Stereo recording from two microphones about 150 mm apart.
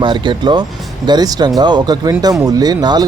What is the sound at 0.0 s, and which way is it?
Speech, 30° right (ahead or behind).